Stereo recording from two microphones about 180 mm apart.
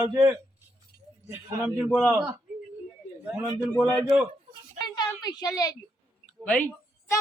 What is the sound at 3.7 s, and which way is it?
Speech, 5° left (ahead or behind).